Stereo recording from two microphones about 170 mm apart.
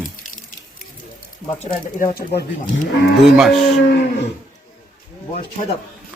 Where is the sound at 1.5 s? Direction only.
50° left (ahead or behind).